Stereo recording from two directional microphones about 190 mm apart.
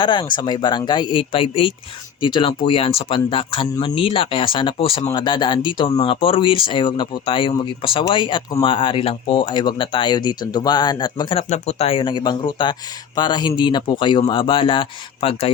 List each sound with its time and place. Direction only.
0.0 s speech: 25° left (ahead or behind)
11.4 s speech: 35° left (ahead or behind)